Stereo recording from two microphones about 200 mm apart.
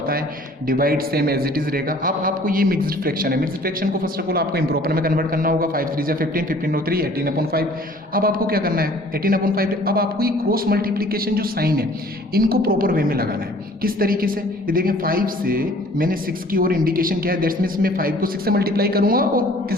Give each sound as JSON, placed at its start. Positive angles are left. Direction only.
{"t": 0.7, "sound": "a man's voice", "side_deg": -45}